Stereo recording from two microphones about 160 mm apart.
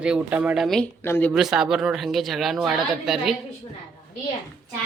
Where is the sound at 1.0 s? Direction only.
10° left (ahead or behind).